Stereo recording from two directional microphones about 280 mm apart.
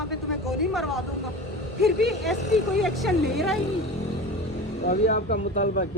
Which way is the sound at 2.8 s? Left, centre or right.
Centre.